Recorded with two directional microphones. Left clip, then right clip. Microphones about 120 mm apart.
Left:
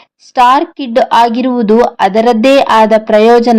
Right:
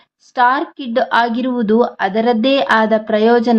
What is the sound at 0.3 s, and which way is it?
A woman's voice, 35° left (ahead or behind).